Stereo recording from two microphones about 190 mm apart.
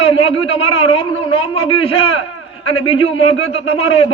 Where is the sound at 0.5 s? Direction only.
25° left (ahead or behind).